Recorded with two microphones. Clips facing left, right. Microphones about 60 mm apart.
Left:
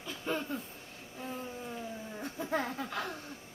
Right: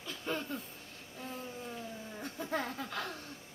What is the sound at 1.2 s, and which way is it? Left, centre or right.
Laughter, centre.